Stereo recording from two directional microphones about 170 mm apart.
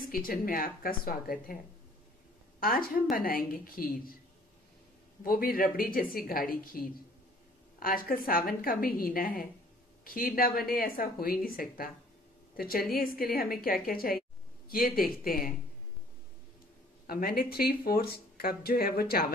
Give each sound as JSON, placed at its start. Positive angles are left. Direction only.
{"t": 0.1, "sound": "speech", "side_deg": 55}
{"t": 2.6, "sound": "speech", "side_deg": 60}
{"t": 5.2, "sound": "a woman's voice", "side_deg": 60}
{"t": 17.0, "sound": "speech", "side_deg": 60}